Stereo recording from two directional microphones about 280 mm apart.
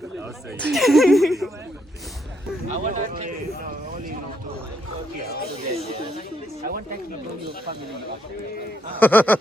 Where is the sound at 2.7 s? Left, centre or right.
Right.